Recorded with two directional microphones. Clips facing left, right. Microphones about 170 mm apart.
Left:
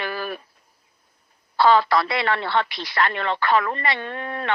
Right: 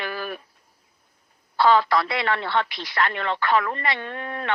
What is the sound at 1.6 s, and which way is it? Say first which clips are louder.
A woman's voice: left 1 dB; 35° left (ahead or behind).